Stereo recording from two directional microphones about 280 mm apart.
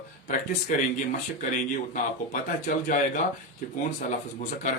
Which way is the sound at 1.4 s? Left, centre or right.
Left.